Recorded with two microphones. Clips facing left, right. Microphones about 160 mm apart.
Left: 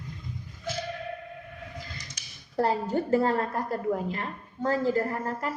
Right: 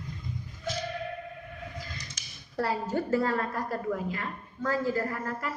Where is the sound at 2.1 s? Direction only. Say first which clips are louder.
Left 5 dB; 30° left (ahead or behind).